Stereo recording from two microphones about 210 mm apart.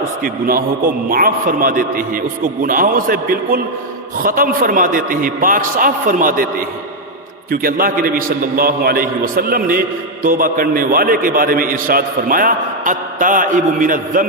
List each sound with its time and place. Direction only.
0.2 s a man's voice: 40° right (ahead or behind)